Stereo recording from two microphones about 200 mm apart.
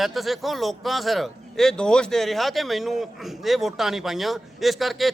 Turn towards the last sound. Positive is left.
turn(degrees=0)  # may be behind; listen again after turning